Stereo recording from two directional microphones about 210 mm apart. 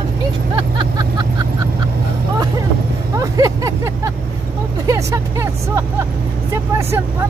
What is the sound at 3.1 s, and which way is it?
Vehicle, 15° right (ahead or behind).